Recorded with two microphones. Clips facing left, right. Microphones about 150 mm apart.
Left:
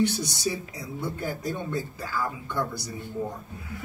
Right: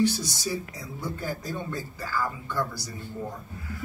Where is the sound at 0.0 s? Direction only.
60° left (ahead or behind).